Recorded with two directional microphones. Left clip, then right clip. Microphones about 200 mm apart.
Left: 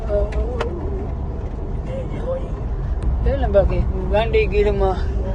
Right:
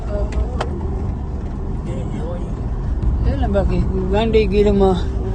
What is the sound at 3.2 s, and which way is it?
Speech, 10° right (ahead or behind).